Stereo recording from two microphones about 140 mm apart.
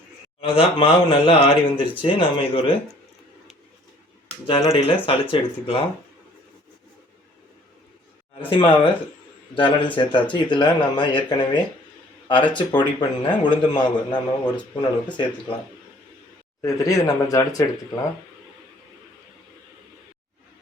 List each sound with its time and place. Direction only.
0.4 s a man's voice: 40° left (ahead or behind)
4.7 s a man's voice: 40° left (ahead or behind)
8.4 s a man's voice: 40° left (ahead or behind)
16.6 s speech: 20° left (ahead or behind)